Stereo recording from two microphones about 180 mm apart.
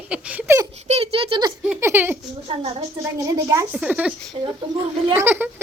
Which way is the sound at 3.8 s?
5° right (ahead or behind).